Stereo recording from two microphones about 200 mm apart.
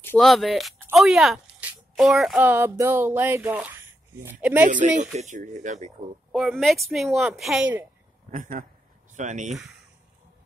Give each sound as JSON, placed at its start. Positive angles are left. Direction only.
{"t": 0.0, "sound": "a woman's voice", "side_deg": 5}
{"t": 4.6, "sound": "speech", "side_deg": -40}
{"t": 6.3, "sound": "speech", "side_deg": 0}
{"t": 8.3, "sound": "speech", "side_deg": -40}